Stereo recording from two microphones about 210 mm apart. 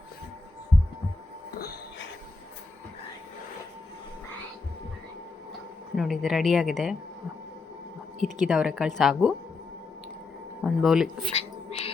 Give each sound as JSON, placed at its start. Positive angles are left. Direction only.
{"t": 1.5, "sound": "music", "side_deg": 45}
{"t": 6.0, "sound": "a woman's voice", "side_deg": 0}
{"t": 8.2, "sound": "a woman's voice", "side_deg": 0}
{"t": 10.6, "sound": "speech", "side_deg": -5}
{"t": 11.3, "sound": "music", "side_deg": 30}